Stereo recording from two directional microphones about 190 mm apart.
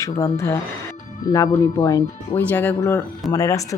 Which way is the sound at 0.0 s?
15° left (ahead or behind).